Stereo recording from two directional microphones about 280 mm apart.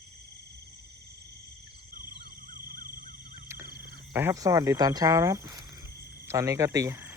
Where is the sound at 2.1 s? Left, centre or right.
Right.